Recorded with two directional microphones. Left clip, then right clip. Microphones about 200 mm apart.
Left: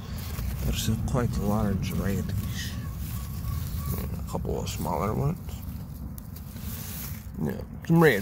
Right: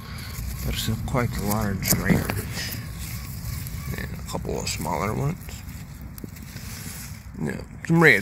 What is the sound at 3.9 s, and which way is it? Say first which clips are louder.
Speech: right 3 dB; 5° right (ahead or behind).